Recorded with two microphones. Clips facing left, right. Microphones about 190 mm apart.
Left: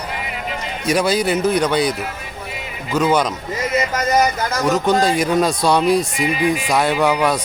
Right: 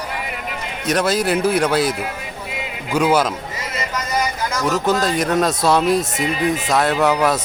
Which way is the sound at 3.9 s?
45° left (ahead or behind).